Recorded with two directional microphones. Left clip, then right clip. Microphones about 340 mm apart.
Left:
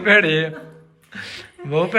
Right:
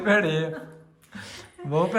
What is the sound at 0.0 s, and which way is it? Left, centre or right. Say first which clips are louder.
A man's voice: left 7 dB; centre.